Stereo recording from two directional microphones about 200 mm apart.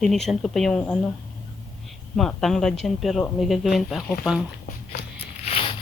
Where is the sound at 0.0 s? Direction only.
Centre (ahead or behind).